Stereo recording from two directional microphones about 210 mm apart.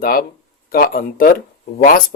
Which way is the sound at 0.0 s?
45° left (ahead or behind).